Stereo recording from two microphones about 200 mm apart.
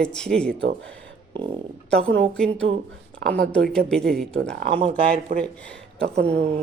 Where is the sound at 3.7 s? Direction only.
5° left (ahead or behind).